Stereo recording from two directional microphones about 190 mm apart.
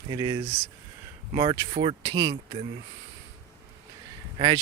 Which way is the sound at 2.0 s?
20° right (ahead or behind).